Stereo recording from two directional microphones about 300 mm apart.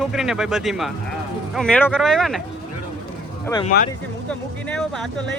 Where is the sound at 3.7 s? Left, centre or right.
Left.